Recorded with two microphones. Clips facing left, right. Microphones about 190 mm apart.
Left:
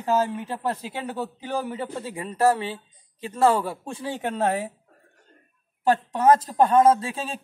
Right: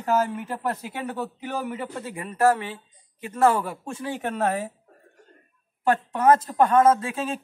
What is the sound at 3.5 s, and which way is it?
A man's voice, 30° left (ahead or behind).